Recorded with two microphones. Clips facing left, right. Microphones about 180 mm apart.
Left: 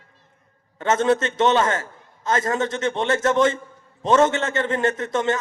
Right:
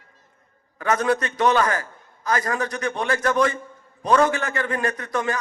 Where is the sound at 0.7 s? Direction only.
25° left (ahead or behind).